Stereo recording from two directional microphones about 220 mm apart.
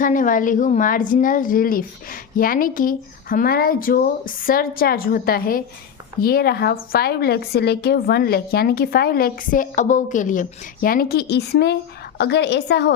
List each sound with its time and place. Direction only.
0.0 s a woman's voice: 35° left (ahead or behind)